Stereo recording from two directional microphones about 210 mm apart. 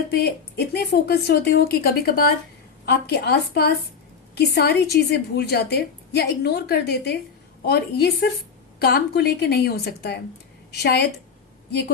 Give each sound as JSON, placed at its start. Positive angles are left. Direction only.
{"t": 0.2, "sound": "speech", "side_deg": 50}